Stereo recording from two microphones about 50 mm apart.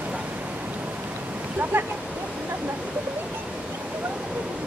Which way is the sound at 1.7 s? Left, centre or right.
Right.